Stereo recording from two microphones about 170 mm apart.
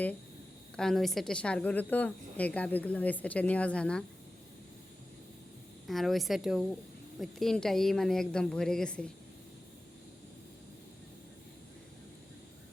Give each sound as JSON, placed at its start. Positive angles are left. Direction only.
{"t": 0.8, "sound": "a woman's voice", "side_deg": 0}
{"t": 5.9, "sound": "a woman's voice", "side_deg": 0}